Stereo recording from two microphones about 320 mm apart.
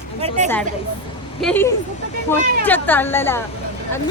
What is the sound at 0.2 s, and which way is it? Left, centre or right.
Speech, right.